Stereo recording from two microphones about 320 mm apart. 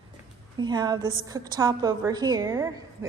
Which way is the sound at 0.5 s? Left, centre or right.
Centre.